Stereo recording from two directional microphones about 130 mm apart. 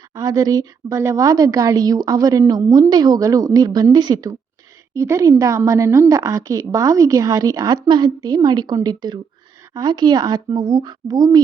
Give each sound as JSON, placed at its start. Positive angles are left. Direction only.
{"t": 0.1, "sound": "speech", "side_deg": -30}